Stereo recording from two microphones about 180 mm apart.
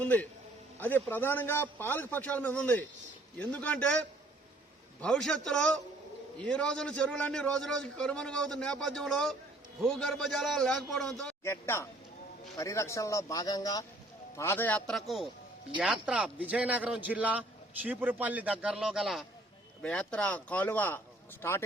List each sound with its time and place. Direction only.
0.0 s a man's voice: 10° left (ahead or behind)
4.9 s a man's voice: 5° left (ahead or behind)
11.4 s a man's voice: 15° left (ahead or behind)